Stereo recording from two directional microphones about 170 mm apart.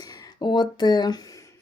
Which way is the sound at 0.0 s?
20° left (ahead or behind).